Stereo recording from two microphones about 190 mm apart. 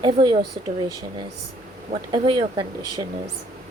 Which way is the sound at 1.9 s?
30° right (ahead or behind).